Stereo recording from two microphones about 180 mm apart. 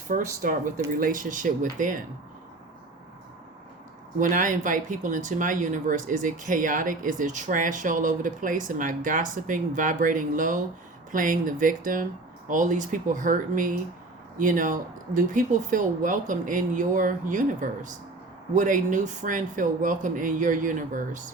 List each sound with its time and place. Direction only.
0.1 s speech: 45° right (ahead or behind)
4.2 s speech: 45° right (ahead or behind)